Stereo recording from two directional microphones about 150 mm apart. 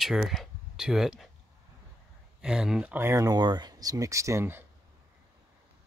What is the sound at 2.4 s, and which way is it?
Speech, 5° right (ahead or behind).